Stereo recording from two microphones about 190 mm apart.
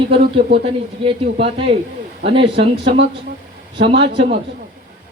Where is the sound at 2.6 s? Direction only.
65° right (ahead or behind).